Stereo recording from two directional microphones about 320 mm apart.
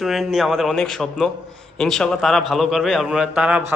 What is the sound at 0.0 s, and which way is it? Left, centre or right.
A man's voice, centre.